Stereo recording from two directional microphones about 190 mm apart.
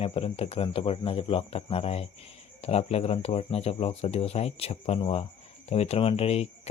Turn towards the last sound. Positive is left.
turn(degrees=30)  # may be behind; listen again after turning